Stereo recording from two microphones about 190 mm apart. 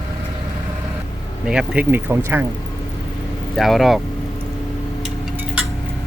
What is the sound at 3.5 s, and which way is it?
Speech, centre (ahead or behind).